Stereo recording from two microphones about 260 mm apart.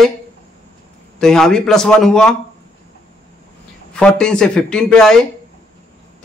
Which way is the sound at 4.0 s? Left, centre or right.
Centre.